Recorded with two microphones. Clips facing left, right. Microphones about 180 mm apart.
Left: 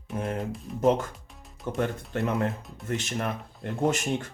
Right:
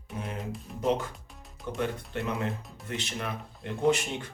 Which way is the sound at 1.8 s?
50° left (ahead or behind).